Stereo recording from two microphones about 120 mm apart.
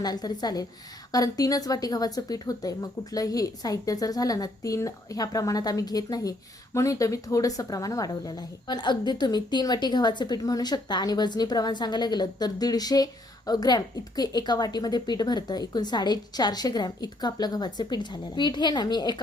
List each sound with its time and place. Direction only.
0.0 s speech: 35° left (ahead or behind)